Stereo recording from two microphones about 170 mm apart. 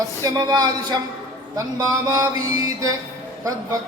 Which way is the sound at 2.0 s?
20° right (ahead or behind).